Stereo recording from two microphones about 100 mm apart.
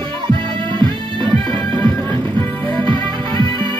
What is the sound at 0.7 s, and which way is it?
Music, 50° right (ahead or behind).